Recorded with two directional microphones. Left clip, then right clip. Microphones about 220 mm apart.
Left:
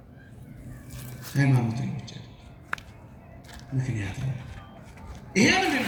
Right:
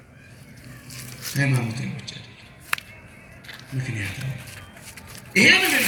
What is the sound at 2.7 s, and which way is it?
Whip, 5° left (ahead or behind).